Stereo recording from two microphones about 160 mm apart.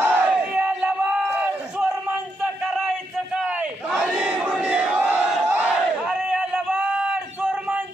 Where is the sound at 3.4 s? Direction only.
10° right (ahead or behind).